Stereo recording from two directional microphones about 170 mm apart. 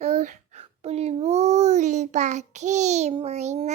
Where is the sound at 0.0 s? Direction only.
45° right (ahead or behind).